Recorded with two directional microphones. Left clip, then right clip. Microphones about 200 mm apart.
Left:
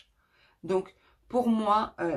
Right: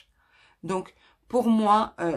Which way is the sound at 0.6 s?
45° right (ahead or behind).